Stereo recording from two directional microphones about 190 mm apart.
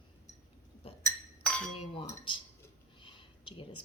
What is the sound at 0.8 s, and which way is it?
Chink, 30° left (ahead or behind).